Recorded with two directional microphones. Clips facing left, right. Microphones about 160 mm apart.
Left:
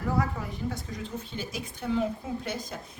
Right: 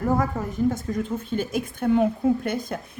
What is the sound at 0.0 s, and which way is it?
A woman's voice, 45° right (ahead or behind).